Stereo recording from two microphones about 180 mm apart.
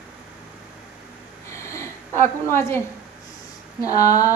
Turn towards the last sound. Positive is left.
turn(degrees=20)  # may be behind; listen again after turning